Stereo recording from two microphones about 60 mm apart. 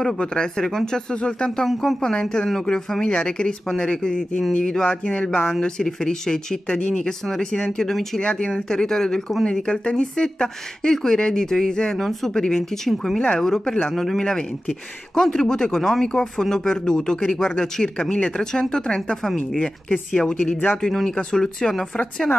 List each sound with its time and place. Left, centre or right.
0.0 s speech: centre
1.7 s speech: centre
8.2 s speech: centre